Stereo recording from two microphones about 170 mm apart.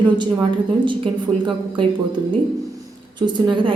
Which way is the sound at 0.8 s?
30° right (ahead or behind).